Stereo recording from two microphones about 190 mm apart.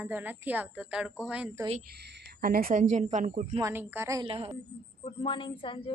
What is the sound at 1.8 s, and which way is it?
Speech, 60° right (ahead or behind).